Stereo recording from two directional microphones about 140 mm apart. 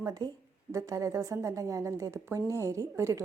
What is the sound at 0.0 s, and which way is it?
A woman's voice, 25° right (ahead or behind).